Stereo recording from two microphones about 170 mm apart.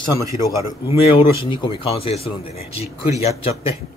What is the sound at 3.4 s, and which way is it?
Speech, 35° left (ahead or behind).